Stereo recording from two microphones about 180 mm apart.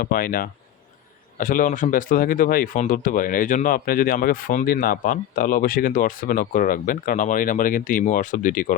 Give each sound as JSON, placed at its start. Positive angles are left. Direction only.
{"t": 0.0, "sound": "speech", "side_deg": 55}